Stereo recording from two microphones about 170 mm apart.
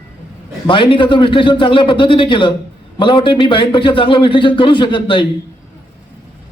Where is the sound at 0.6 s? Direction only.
30° left (ahead or behind).